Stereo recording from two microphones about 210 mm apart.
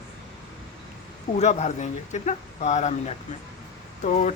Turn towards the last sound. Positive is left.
turn(degrees=35)  # may be behind; listen again after turning